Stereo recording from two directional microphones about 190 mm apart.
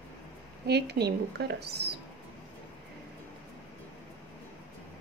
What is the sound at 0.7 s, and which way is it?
Speech, 60° right (ahead or behind).